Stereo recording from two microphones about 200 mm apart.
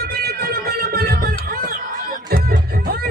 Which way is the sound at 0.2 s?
50° right (ahead or behind).